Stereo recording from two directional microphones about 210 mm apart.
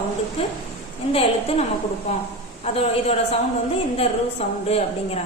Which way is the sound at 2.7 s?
30° left (ahead or behind).